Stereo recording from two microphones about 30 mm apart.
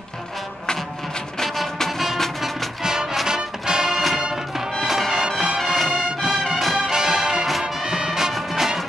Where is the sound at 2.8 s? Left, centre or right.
Centre.